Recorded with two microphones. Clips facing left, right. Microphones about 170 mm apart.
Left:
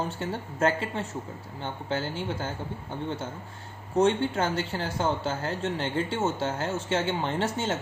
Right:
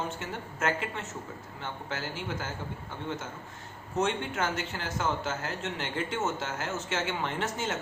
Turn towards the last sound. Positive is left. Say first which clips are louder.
# left 4 dB
turn(degrees=30)  # may be behind; listen again after turning